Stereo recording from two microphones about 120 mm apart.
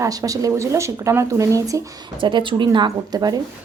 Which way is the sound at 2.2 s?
40° right (ahead or behind).